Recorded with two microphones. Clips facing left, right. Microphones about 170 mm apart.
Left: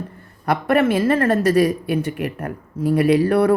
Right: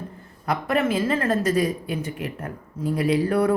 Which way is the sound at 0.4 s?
65° left (ahead or behind).